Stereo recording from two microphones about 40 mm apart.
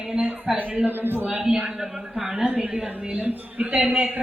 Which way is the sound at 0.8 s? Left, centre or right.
Right.